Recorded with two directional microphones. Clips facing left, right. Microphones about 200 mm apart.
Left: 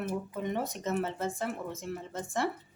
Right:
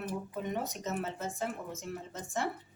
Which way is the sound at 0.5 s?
65° left (ahead or behind).